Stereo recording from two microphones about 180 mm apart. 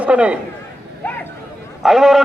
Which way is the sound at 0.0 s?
5° right (ahead or behind).